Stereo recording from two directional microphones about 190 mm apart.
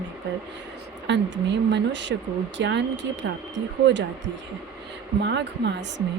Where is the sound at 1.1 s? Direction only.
70° right (ahead or behind).